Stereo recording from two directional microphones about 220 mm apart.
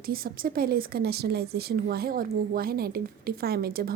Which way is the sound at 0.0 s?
40° right (ahead or behind).